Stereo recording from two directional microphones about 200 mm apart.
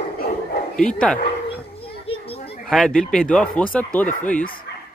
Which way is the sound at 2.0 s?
30° left (ahead or behind).